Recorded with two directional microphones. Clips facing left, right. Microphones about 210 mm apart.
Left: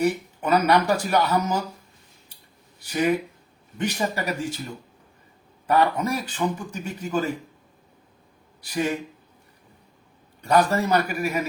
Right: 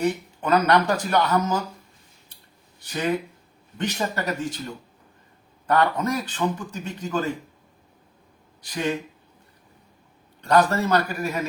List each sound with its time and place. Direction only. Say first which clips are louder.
0.0 s a man's voice: left 1 dB; 10° left (ahead or behind)
2.8 s a man's voice: left 3 dB; 10° left (ahead or behind)
5.6 s a man's voice: even; 10° left (ahead or behind)
8.6 s a man's voice: left 1 dB; 10° left (ahead or behind)
10.4 s a man's voice: right 1 dB; 10° left (ahead or behind)